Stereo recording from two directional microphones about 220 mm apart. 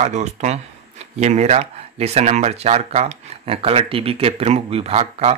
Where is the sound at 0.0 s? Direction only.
30° right (ahead or behind).